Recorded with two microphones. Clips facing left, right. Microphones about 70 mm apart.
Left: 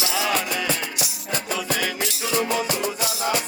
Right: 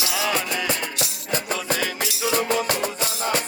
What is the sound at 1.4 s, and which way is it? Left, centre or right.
Music, right.